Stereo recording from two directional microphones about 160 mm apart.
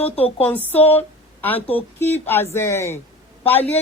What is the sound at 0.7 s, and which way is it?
Speech, 10° left (ahead or behind).